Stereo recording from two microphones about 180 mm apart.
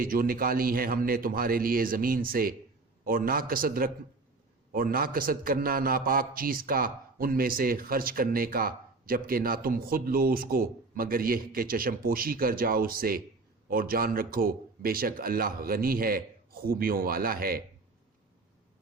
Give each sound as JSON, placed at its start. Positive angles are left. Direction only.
{"t": 0.0, "sound": "a man's voice", "side_deg": -55}